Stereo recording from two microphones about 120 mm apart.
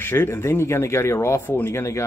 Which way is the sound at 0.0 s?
20° left (ahead or behind).